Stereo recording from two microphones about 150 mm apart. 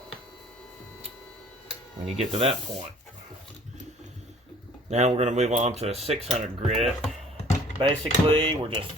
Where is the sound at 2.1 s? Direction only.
45° right (ahead or behind).